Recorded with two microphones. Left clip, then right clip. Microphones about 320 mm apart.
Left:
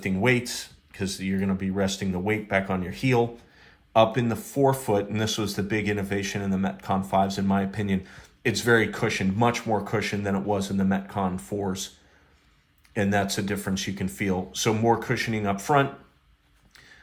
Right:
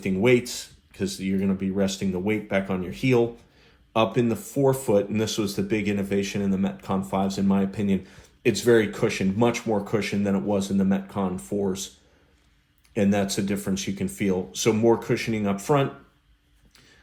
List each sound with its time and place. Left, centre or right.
0.0 s speech: left
12.9 s speech: left